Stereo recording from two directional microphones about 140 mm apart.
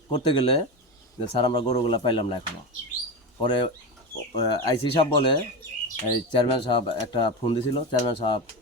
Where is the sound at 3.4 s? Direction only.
35° left (ahead or behind).